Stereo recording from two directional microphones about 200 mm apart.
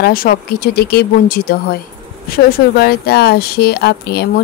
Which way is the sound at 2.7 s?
50° left (ahead or behind).